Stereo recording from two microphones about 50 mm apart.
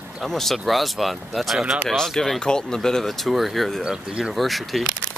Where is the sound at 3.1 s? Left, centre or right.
Centre.